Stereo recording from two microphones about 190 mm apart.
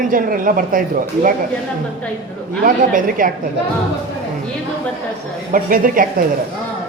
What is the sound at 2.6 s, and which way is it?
Speech, 45° right (ahead or behind).